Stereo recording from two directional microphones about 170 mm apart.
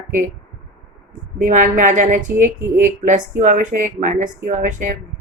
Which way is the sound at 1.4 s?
50° right (ahead or behind).